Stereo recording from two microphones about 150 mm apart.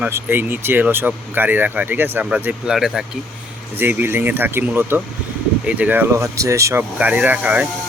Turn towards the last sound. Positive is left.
turn(degrees=-10)  # may be behind; listen again after turning